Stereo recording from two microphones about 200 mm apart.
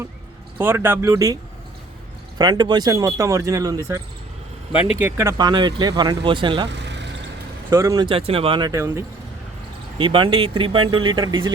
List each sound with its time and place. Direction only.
0.6 s speech: 10° right (ahead or behind)
2.4 s speech: 20° right (ahead or behind)
4.9 s speech: 10° right (ahead or behind)
6.7 s vehicle: 60° right (ahead or behind)
7.7 s speech: 15° right (ahead or behind)